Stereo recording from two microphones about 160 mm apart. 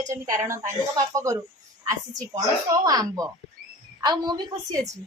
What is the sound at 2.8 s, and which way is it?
A woman's voice, 25° right (ahead or behind).